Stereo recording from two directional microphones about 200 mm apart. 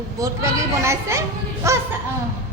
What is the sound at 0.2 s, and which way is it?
A woman's voice, 15° right (ahead or behind).